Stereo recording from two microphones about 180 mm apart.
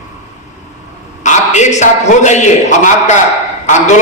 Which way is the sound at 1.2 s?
40° left (ahead or behind).